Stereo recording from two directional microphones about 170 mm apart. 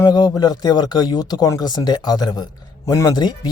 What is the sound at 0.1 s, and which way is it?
A man's voice, 25° left (ahead or behind).